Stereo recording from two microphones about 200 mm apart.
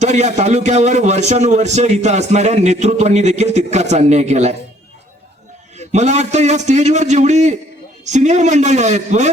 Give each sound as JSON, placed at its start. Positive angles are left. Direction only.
{"t": 0.0, "sound": "a man's voice", "side_deg": -35}
{"t": 5.7, "sound": "a man's voice", "side_deg": -35}